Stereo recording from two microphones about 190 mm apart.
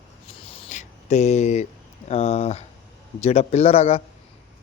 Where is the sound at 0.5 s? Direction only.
40° left (ahead or behind).